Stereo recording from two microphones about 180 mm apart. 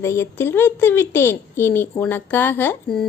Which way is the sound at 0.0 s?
15° left (ahead or behind).